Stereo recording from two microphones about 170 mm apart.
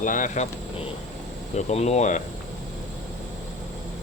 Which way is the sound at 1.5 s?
40° left (ahead or behind).